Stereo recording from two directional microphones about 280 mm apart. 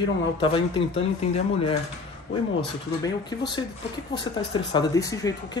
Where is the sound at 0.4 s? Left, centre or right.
Centre.